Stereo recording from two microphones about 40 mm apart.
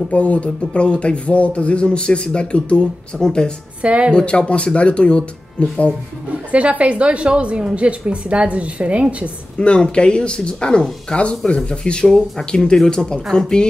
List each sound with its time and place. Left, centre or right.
0.1 s speech: left; by 3.5 s centre
3.8 s a woman's voice: right
4.1 s speech: left
6.5 s a woman's voice: right
9.6 s speech: left